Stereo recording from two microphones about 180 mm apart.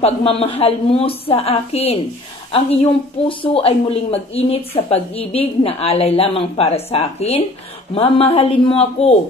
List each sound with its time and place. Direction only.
0.0 s speech: 30° left (ahead or behind)